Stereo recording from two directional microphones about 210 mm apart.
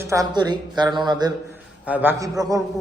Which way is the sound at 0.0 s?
15° right (ahead or behind).